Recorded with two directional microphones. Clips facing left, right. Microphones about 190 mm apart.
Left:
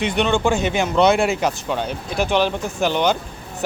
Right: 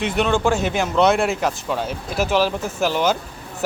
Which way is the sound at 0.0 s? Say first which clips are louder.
Even; centre (ahead or behind).